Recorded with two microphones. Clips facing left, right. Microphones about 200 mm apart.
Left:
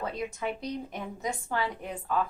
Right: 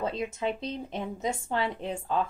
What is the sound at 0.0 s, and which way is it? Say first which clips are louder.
Speech: right 3 dB; 25° right (ahead or behind).